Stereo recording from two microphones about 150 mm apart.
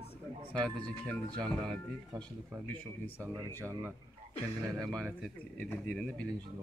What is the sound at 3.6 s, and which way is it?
Speech, 20° right (ahead or behind).